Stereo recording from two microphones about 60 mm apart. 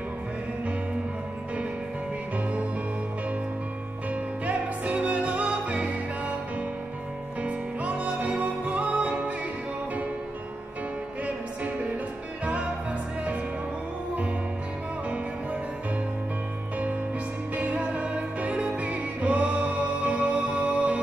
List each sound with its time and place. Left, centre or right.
4.1 s music: right
7.4 s music: right
11.2 s music: right
17.6 s music: right